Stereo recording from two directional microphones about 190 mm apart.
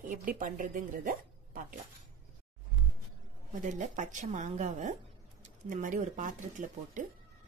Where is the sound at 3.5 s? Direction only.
40° right (ahead or behind).